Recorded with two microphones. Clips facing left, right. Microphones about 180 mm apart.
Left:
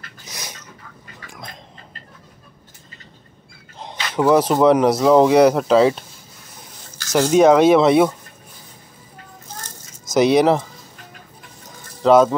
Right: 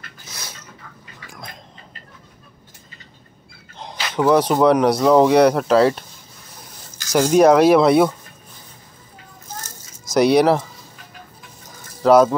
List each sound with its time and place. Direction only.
0.2 s a sound: 15° left (ahead or behind)
3.7 s speech: 5° left (ahead or behind)
7.2 s speech: 5° right (ahead or behind)
10.1 s speech: centre (ahead or behind)
12.0 s speech: 5° right (ahead or behind)